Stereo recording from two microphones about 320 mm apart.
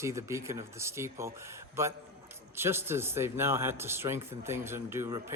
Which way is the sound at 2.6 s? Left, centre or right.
Centre.